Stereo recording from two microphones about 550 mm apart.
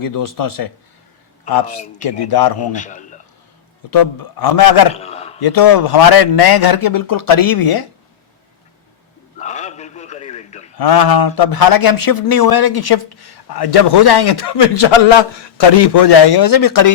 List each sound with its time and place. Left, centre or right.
0.0 s a man's voice: left
2.7 s a man's voice: centre
3.9 s a man's voice: left
4.9 s a man's voice: centre
5.4 s a man's voice: left
9.4 s a sound: centre
10.8 s a man's voice: left